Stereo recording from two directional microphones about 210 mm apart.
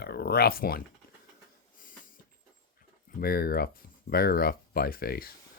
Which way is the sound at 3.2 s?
45° left (ahead or behind).